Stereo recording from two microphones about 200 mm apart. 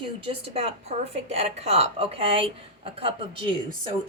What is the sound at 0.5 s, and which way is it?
A woman's voice, 30° right (ahead or behind).